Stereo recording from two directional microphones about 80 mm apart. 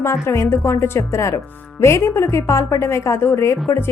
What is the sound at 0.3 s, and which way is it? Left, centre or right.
Speech, left.